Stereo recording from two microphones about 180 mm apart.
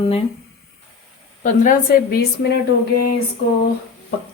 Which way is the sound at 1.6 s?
55° left (ahead or behind).